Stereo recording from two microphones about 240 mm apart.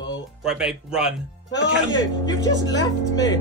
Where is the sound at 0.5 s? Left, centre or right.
Centre.